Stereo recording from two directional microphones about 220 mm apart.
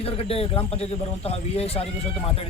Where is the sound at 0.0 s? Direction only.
25° left (ahead or behind).